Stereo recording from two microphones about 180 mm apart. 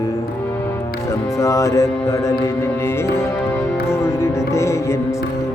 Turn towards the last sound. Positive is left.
turn(degrees=15)  # may be behind; listen again after turning